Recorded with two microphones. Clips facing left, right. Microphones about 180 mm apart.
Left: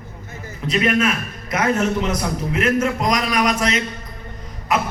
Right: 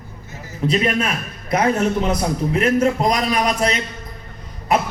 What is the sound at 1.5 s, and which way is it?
A man's voice, 35° right (ahead or behind).